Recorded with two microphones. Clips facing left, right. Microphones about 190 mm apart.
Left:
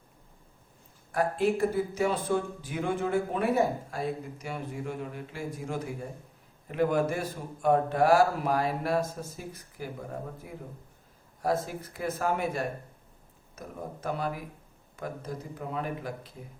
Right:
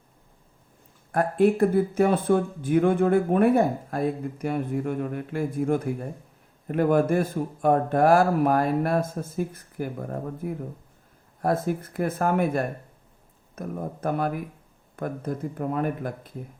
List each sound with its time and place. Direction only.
1.1 s a man's voice: 55° right (ahead or behind)